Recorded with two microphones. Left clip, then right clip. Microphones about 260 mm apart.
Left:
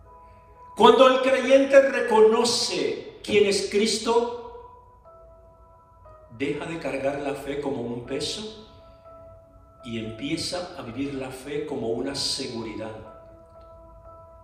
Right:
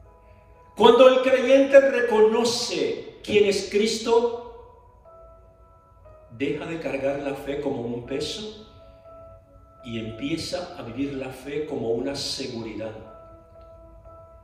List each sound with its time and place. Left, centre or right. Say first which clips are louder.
0.7 s a man's voice: right 1 dB; left
6.4 s a man's voice: right 1 dB; left
9.8 s a man's voice: right 1 dB; left